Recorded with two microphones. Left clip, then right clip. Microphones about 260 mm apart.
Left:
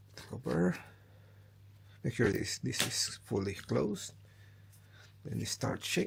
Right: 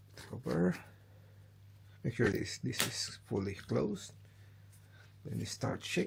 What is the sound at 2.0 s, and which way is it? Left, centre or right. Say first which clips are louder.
Speech: left 2 dB; centre.